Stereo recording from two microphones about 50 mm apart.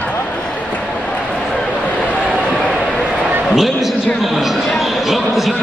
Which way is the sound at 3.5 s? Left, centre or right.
Centre.